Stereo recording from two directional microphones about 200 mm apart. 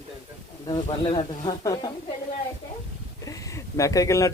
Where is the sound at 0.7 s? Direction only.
25° left (ahead or behind).